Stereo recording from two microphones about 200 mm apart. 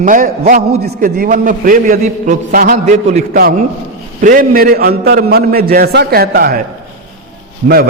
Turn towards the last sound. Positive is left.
turn(degrees=-50)  # may be behind; listen again after turning